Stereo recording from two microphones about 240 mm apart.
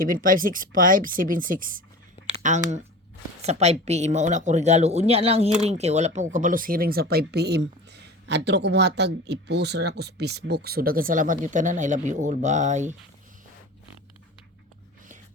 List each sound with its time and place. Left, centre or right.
0.0 s speech: right